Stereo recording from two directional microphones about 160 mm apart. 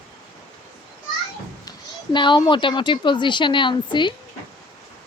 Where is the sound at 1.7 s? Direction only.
30° left (ahead or behind).